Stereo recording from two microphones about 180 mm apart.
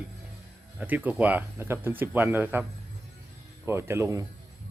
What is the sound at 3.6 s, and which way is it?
Speech, 15° right (ahead or behind).